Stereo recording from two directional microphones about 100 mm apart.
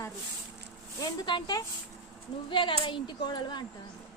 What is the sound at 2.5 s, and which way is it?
Speech, 55° left (ahead or behind).